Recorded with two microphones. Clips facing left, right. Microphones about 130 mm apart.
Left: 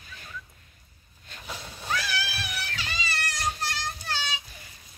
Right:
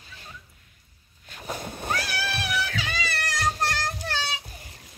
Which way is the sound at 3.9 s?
65° right (ahead or behind).